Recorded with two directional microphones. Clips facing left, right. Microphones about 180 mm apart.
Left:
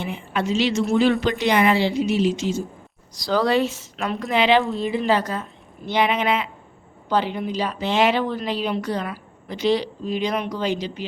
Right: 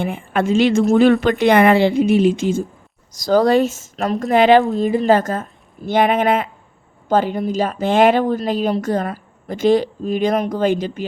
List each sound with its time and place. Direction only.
0.0 s a woman's voice: 50° right (ahead or behind)